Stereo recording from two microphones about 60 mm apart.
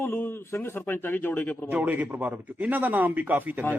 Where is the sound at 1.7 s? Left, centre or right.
Right.